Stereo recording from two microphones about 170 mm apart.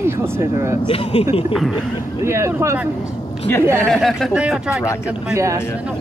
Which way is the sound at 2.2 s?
15° right (ahead or behind).